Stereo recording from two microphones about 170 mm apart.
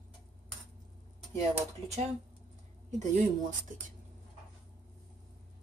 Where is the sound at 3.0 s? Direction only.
50° right (ahead or behind).